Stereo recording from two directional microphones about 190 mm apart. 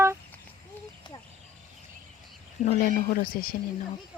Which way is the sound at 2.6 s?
55° left (ahead or behind).